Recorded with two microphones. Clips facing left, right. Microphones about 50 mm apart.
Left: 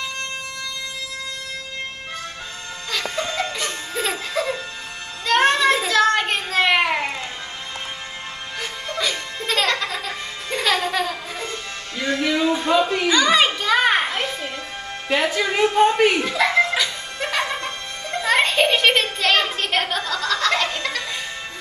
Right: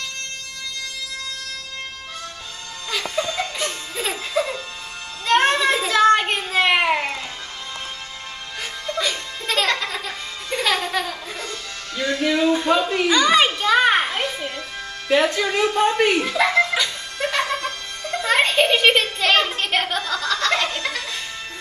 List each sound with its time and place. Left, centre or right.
3.5 s music: centre
5.2 s a sound: centre
8.9 s music: centre
12.0 s music: left
12.3 s a sound: centre
13.6 s music: centre
15.0 s speech: centre
16.5 s music: centre
17.2 s music: centre
18.2 s a sound: centre
20.1 s snicker: centre